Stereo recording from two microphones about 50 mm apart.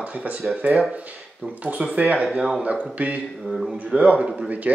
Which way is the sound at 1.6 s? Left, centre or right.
Right.